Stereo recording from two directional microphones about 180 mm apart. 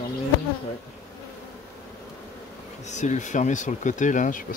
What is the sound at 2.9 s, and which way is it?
Speech, 40° left (ahead or behind).